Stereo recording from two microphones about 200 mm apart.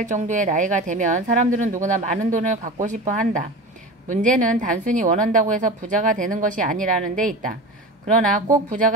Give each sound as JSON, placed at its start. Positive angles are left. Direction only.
{"t": 0.0, "sound": "speech", "side_deg": -40}